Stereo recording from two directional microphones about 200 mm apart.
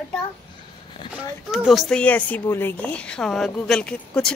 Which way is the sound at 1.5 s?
Centre (ahead or behind).